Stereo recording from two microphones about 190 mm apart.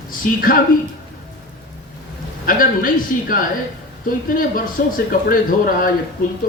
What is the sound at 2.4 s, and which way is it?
Speech, 45° left (ahead or behind).